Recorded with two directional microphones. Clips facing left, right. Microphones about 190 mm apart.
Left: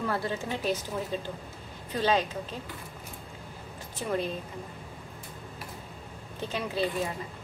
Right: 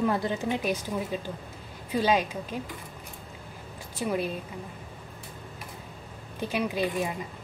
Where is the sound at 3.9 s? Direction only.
10° right (ahead or behind).